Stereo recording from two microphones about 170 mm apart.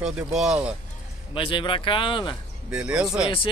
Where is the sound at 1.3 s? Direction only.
30° left (ahead or behind).